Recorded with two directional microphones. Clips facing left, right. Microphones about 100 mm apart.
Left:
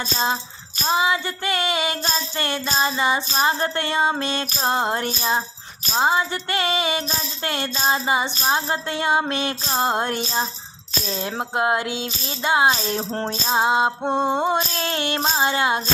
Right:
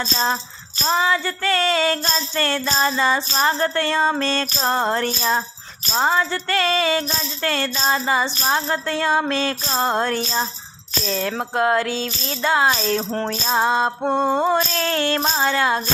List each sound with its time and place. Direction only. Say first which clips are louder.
0.0 s music: right 1 dB; 15° left (ahead or behind)